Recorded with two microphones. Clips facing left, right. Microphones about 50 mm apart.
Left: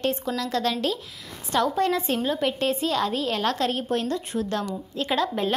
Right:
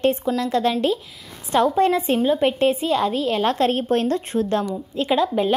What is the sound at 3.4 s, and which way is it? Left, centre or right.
A woman's voice, right.